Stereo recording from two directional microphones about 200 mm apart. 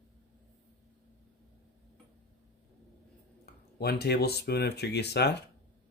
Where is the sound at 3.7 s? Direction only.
55° left (ahead or behind).